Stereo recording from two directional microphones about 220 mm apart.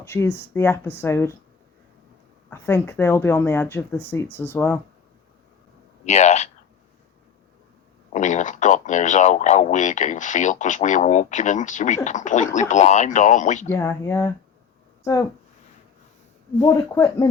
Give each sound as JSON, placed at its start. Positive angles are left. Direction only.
{"t": 0.0, "sound": "speech", "side_deg": 10}
{"t": 2.5, "sound": "speech", "side_deg": 10}
{"t": 6.1, "sound": "speech", "side_deg": 30}
{"t": 8.1, "sound": "speech", "side_deg": 35}
{"t": 13.7, "sound": "speech", "side_deg": 10}
{"t": 16.6, "sound": "speech", "side_deg": 15}